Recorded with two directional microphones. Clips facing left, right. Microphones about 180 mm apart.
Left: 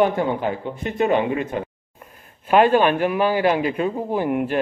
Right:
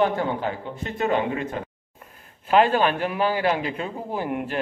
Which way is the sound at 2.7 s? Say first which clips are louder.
Left 5 dB; 15° left (ahead or behind).